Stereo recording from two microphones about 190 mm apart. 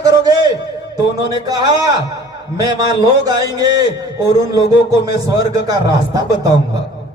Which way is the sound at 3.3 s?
20° right (ahead or behind).